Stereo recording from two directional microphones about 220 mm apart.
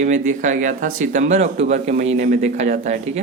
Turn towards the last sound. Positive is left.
turn(degrees=-30)  # may be behind; listen again after turning